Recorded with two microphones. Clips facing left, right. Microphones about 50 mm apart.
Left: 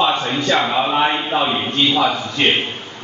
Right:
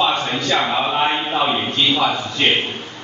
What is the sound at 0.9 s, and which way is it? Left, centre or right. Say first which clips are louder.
Speech: left 2 dB; centre.